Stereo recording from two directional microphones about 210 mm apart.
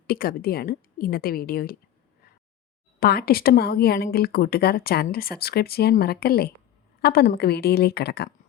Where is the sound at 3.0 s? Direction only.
45° left (ahead or behind).